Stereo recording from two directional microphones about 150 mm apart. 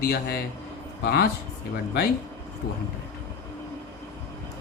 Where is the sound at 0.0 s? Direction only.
90° left.